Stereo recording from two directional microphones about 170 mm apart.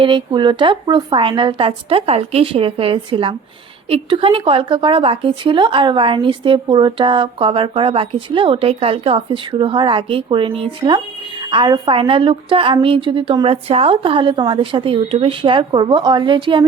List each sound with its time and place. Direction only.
0.0 s a woman's voice: 25° right (ahead or behind)